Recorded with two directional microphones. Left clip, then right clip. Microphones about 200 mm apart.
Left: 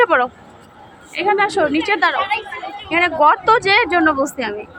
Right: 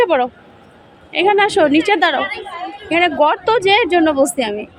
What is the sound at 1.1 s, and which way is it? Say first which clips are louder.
A woman's voice: right 3 dB; 50° right (ahead or behind).